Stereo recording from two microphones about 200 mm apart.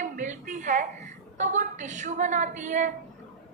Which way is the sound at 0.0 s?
40° right (ahead or behind).